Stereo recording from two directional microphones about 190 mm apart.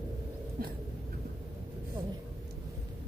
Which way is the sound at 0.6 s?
50° right (ahead or behind).